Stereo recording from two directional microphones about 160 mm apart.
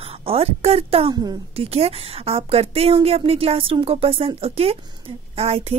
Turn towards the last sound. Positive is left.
turn(degrees=-40)  # may be behind; listen again after turning